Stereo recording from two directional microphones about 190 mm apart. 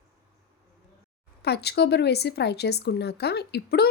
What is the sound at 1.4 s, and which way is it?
Speech, 60° left (ahead or behind).